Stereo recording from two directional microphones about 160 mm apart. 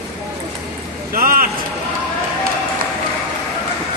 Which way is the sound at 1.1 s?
60° right (ahead or behind).